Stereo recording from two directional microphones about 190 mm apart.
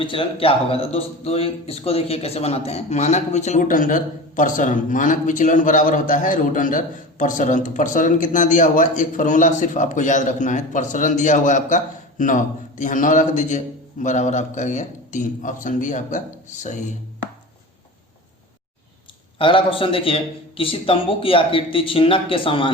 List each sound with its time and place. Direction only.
0.0 s a man's voice: 25° left (ahead or behind)
19.4 s a man's voice: 25° left (ahead or behind)